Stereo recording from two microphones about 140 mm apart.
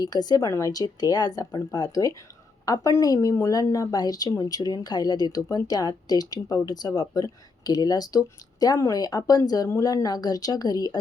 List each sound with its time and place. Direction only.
0.0 s speech: 30° left (ahead or behind)